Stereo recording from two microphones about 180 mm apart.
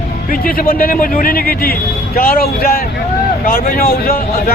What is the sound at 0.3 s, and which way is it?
Speech, 50° left (ahead or behind).